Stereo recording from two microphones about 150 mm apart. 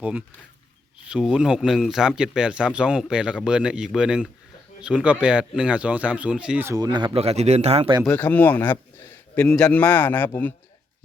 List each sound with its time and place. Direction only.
0.0 s speech: 10° right (ahead or behind)
6.7 s speech: 25° right (ahead or behind); by 7.9 s 40° right (ahead or behind)
8.0 s a man's voice: 10° left (ahead or behind)